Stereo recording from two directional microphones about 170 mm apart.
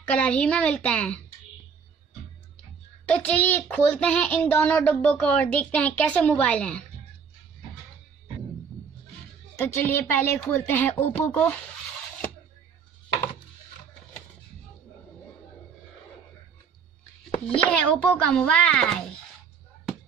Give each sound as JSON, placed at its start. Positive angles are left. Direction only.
{"t": 0.0, "sound": "speech", "side_deg": 5}
{"t": 3.1, "sound": "speech", "side_deg": 10}
{"t": 9.8, "sound": "speech", "side_deg": 10}
{"t": 17.6, "sound": "speech", "side_deg": 5}